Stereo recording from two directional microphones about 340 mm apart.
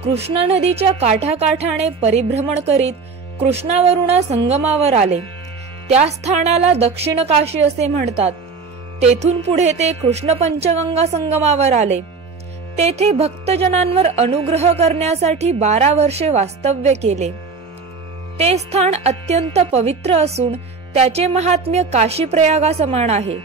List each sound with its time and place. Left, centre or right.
0.0 s a woman's voice: centre
2.8 s music: centre
3.5 s a woman's voice: centre
18.4 s a woman's voice: centre